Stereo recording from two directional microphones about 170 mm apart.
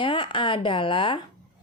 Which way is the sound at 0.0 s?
30° left (ahead or behind).